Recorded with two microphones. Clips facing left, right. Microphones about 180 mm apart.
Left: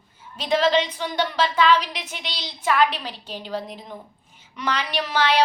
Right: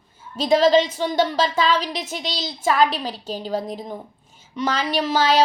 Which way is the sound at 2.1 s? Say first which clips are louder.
Right 7 dB; 40° right (ahead or behind).